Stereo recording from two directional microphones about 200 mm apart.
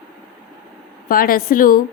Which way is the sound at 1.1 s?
45° left (ahead or behind).